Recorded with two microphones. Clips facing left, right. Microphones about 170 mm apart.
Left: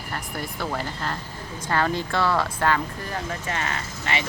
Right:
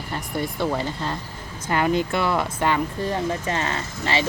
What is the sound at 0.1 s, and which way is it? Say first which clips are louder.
Speech: right 5 dB; 20° right (ahead or behind).